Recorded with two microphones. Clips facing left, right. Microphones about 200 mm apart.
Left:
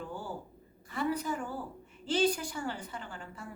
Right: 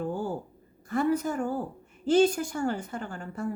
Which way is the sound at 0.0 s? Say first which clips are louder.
Right 9 dB; 45° right (ahead or behind).